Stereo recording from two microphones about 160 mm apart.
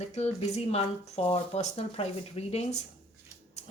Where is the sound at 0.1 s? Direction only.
45° left (ahead or behind).